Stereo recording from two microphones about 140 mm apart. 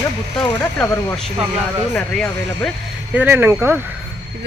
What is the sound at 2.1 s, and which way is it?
Speech, 5° left (ahead or behind).